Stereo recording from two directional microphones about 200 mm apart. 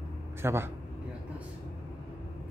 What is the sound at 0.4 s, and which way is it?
Speech, 10° right (ahead or behind).